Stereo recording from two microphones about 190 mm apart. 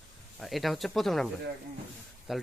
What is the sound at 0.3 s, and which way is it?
Speech, centre (ahead or behind).